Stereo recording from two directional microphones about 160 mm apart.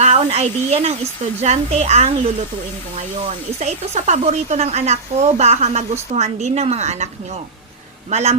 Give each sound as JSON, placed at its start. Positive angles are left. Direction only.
{"t": 0.0, "sound": "speech", "side_deg": -45}
{"t": 8.1, "sound": "speech", "side_deg": -40}